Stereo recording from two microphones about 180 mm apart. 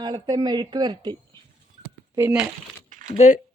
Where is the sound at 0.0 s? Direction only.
25° right (ahead or behind).